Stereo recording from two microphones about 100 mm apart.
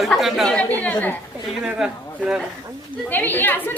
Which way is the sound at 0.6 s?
15° left (ahead or behind).